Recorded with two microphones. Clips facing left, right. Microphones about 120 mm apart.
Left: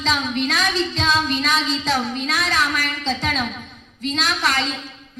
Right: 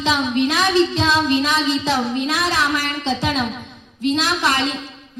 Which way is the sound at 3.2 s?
5° right (ahead or behind).